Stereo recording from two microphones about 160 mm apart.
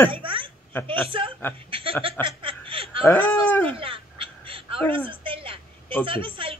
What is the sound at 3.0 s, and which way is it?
Speech, 10° left (ahead or behind).